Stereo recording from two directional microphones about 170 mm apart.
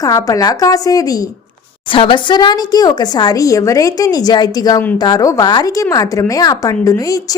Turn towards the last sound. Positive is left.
turn(degrees=20)  # may be behind; listen again after turning